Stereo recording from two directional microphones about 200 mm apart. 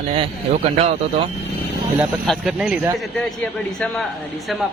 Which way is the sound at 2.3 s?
5° right (ahead or behind).